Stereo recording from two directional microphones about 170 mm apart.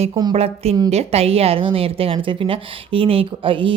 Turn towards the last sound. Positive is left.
turn(degrees=-30)  # may be behind; listen again after turning